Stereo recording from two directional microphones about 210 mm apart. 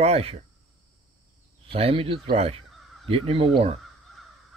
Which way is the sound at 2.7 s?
Centre (ahead or behind).